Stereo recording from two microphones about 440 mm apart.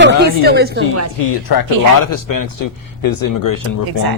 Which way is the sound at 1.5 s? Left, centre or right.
Left.